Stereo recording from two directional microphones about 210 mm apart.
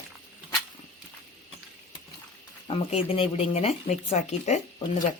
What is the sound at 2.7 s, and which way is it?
Speech, 30° left (ahead or behind).